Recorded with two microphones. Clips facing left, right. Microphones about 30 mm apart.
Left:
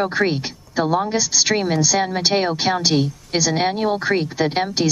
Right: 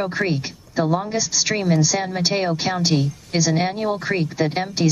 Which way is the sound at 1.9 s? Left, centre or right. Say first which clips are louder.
Left 3 dB; left.